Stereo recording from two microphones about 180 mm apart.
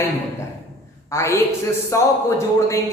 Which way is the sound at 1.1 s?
15° left (ahead or behind).